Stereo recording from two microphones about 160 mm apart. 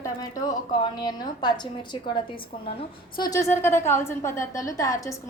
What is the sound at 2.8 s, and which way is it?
A woman's voice, 30° left (ahead or behind).